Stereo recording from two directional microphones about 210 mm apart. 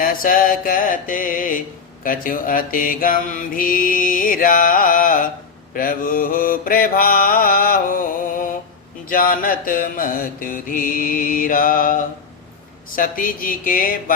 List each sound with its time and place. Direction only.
0.0 s mantra: 40° left (ahead or behind)